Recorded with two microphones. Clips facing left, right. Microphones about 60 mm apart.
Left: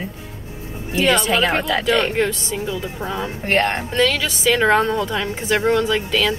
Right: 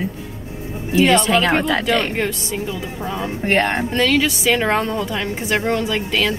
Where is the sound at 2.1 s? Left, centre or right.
Right.